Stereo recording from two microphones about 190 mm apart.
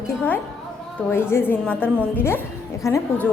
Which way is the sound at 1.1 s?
10° left (ahead or behind).